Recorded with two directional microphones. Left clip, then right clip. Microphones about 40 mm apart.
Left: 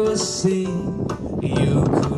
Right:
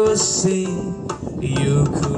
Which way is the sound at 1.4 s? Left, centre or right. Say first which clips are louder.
Even; right.